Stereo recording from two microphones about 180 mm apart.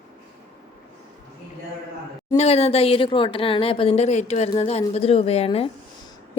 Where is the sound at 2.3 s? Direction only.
35° left (ahead or behind).